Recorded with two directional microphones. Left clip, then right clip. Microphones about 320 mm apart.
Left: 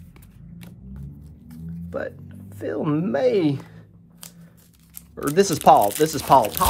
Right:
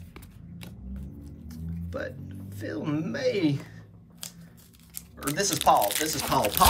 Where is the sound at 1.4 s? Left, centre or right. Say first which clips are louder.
Left 4 dB; centre.